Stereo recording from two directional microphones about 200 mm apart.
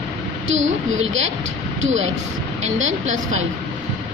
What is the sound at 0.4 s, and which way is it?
Speech, 70° right (ahead or behind).